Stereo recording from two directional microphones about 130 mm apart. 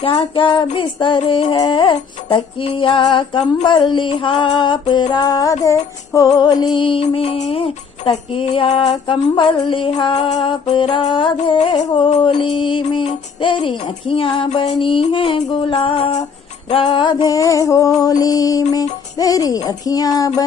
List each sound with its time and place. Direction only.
0.0 s female singing: 40° left (ahead or behind)
9.3 s female singing: 35° left (ahead or behind)
10.4 s music: 40° left (ahead or behind)
11.6 s music: 60° left (ahead or behind)
12.2 s female singing: 40° left (ahead or behind)
13.4 s music: 40° left (ahead or behind)